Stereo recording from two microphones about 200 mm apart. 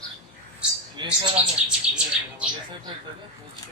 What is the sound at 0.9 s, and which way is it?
Speech, 25° right (ahead or behind).